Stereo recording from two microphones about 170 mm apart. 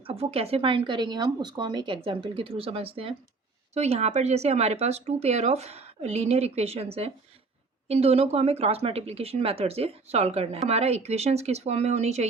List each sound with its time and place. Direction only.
0.0 s speech: 35° right (ahead or behind)